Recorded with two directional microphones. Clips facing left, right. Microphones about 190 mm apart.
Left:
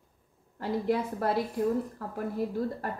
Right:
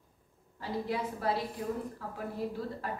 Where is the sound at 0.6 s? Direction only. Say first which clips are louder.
Left 6 dB; 50° left (ahead or behind).